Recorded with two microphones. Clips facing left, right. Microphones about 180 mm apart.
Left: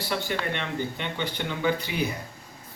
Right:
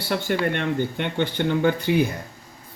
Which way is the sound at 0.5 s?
55° right (ahead or behind).